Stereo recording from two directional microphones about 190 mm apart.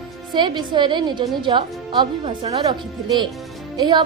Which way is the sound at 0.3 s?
25° right (ahead or behind).